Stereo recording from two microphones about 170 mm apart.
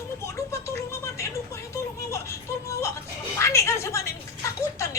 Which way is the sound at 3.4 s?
15° left (ahead or behind).